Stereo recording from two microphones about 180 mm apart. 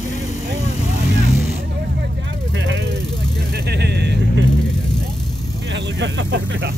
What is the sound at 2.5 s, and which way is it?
Vehicle, 90° right.